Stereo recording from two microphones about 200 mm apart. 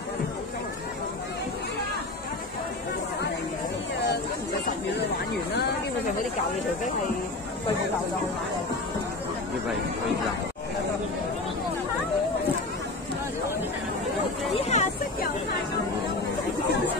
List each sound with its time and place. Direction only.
14.5 s vehicle: 35° left (ahead or behind)